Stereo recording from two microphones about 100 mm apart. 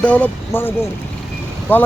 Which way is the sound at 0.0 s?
15° left (ahead or behind).